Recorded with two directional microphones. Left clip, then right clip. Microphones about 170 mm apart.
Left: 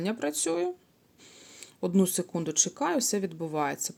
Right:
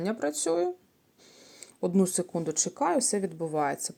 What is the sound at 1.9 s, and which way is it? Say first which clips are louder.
Speech: even; 20° left (ahead or behind).